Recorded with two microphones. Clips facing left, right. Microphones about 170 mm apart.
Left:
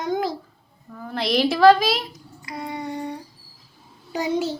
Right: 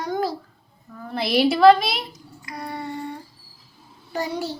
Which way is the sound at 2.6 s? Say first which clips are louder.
Left 1 dB; 15° left (ahead or behind).